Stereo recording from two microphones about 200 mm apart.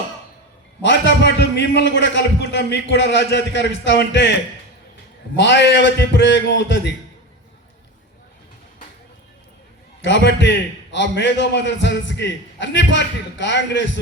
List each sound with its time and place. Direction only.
0.8 s a man's voice: 60° left (ahead or behind)
5.4 s a man's voice: 60° left (ahead or behind)
10.0 s a man's voice: 60° left (ahead or behind)